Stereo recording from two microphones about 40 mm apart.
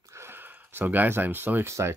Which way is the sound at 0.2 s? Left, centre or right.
Right.